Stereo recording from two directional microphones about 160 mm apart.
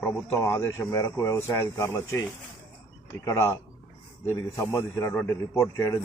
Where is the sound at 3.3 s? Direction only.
15° left (ahead or behind).